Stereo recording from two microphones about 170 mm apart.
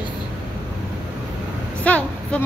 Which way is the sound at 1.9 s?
10° left (ahead or behind).